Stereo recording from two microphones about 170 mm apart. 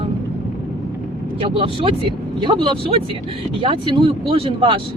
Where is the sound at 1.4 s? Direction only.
35° right (ahead or behind).